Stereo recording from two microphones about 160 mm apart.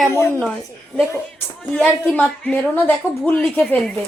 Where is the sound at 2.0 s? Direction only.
10° left (ahead or behind).